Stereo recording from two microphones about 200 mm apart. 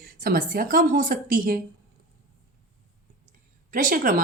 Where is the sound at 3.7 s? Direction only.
40° right (ahead or behind).